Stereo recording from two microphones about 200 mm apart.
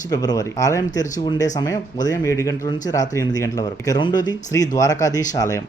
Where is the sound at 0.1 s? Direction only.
20° left (ahead or behind).